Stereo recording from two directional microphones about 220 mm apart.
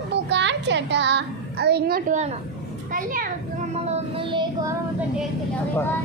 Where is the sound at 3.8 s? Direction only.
20° right (ahead or behind).